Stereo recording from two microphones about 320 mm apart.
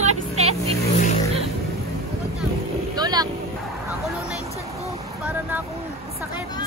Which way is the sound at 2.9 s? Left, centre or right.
Centre.